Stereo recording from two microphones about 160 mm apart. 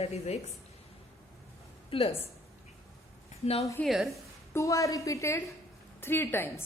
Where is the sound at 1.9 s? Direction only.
35° left (ahead or behind).